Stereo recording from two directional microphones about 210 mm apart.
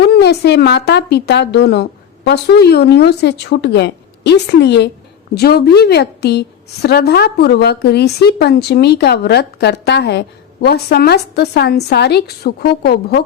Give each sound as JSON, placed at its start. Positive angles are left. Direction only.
{"t": 0.0, "sound": "a woman's voice", "side_deg": 50}